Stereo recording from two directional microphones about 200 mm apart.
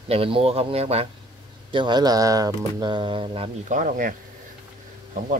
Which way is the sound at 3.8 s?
45° right (ahead or behind).